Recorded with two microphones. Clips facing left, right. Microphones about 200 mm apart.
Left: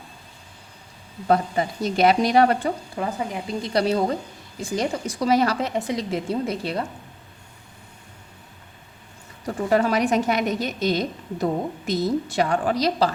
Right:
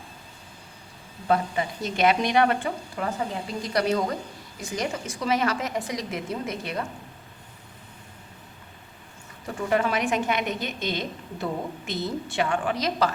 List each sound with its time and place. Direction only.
1.3 s a woman's voice: 40° left (ahead or behind)
2.9 s a woman's voice: 20° left (ahead or behind)
3.7 s a woman's voice: 30° left (ahead or behind)
9.6 s a woman's voice: 40° left (ahead or behind)